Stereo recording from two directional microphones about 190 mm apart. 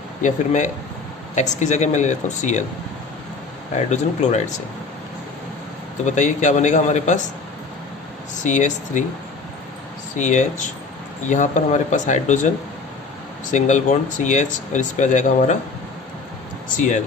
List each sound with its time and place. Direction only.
0.2 s speech: 40° left (ahead or behind)
3.8 s speech: 40° left (ahead or behind)
6.1 s speech: 40° left (ahead or behind)
8.4 s speech: 40° left (ahead or behind)
10.2 s speech: 40° left (ahead or behind)
13.5 s speech: 40° left (ahead or behind)
16.7 s speech: 40° left (ahead or behind)